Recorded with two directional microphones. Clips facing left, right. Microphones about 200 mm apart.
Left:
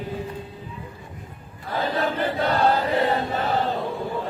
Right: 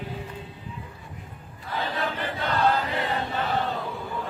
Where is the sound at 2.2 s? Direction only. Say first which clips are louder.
Left 3 dB; 40° left (ahead or behind).